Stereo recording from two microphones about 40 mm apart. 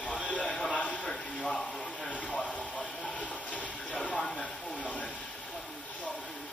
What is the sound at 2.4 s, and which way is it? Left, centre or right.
Train, left.